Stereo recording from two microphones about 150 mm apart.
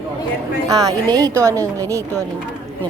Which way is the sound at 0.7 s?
25° right (ahead or behind).